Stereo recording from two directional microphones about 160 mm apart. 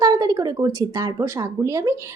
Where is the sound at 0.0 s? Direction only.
25° right (ahead or behind).